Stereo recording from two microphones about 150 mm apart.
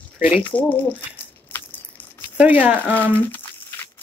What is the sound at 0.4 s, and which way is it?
Crumpling, 10° left (ahead or behind).